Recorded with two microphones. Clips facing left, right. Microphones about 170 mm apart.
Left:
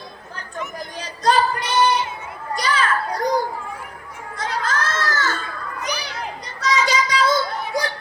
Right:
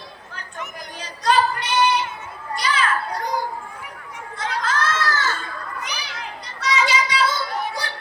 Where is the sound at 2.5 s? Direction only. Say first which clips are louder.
Left 1 dB; 40° left (ahead or behind).